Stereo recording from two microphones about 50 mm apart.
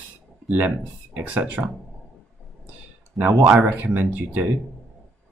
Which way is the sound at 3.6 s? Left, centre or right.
Right.